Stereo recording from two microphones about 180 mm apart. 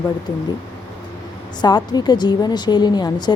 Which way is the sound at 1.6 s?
25° left (ahead or behind).